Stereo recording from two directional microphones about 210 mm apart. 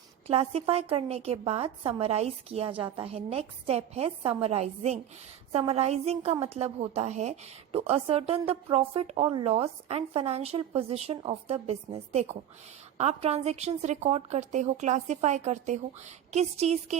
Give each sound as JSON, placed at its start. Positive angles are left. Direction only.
{"t": 0.3, "sound": "a woman's voice", "side_deg": -30}